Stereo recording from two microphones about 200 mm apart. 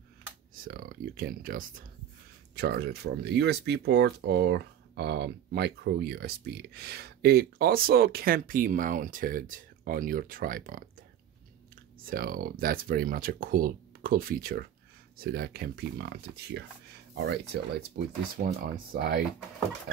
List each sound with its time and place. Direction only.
0.7 s speech: 45° right (ahead or behind)
12.1 s speech: 45° right (ahead or behind)